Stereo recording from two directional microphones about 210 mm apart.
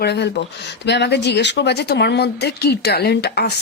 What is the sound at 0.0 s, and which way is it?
A woman's voice, 50° left (ahead or behind).